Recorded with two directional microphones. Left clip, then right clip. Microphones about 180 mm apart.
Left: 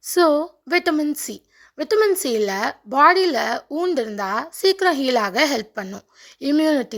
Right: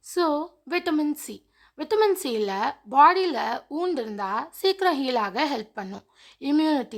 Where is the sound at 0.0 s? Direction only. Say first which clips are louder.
Left 8 dB; 20° left (ahead or behind).